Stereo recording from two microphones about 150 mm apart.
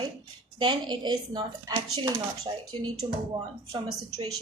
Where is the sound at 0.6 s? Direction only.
30° right (ahead or behind).